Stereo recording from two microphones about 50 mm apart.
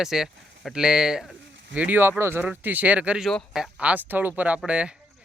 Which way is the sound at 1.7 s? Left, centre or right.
Right.